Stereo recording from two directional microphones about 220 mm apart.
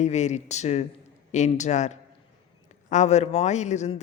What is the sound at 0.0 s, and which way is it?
A man's voice, 30° left (ahead or behind).